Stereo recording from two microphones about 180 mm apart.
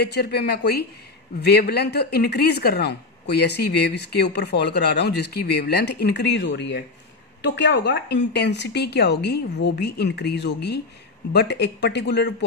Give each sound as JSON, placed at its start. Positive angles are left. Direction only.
{"t": 0.0, "sound": "speech", "side_deg": 65}